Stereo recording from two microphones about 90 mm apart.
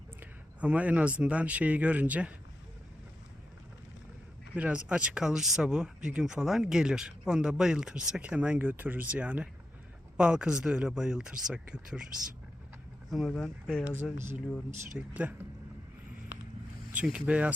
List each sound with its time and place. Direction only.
0.2 s speech: 15° right (ahead or behind)
4.5 s speech: 15° right (ahead or behind)
13.1 s speech: centre (ahead or behind)
14.9 s speech: 15° right (ahead or behind)
16.9 s speech: 15° right (ahead or behind)